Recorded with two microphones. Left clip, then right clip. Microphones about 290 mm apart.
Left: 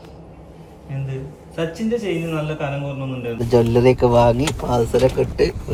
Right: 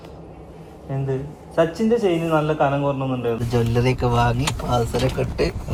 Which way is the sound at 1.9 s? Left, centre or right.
Right.